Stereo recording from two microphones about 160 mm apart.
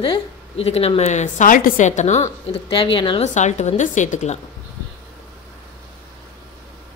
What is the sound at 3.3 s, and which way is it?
A woman's voice, 45° left (ahead or behind).